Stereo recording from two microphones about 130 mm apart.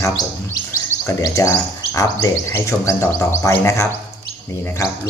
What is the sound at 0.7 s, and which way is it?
Speech, 25° left (ahead or behind).